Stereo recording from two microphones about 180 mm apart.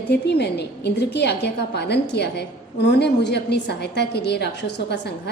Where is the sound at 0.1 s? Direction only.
65° left (ahead or behind).